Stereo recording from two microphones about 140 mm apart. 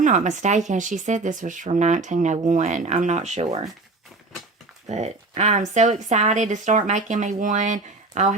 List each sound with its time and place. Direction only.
0.0 s speech: 60° right (ahead or behind)
4.9 s speech: 55° right (ahead or behind)